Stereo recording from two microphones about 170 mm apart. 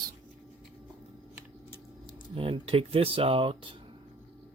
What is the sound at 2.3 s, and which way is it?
Speech, 35° right (ahead or behind).